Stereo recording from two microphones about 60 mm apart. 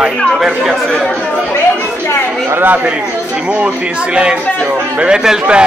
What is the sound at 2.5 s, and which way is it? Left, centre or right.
Speech, right.